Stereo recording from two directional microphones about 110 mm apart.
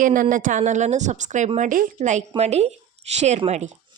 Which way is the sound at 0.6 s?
90° right.